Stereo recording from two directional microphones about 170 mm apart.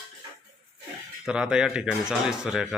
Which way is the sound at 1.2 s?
5° right (ahead or behind).